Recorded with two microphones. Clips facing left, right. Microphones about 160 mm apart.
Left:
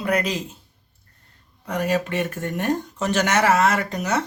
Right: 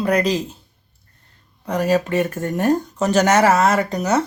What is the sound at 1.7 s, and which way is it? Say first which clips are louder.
Speech: right 5 dB; 35° right (ahead or behind).